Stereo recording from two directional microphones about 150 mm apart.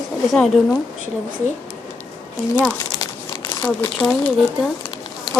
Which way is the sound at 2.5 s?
20° left (ahead or behind).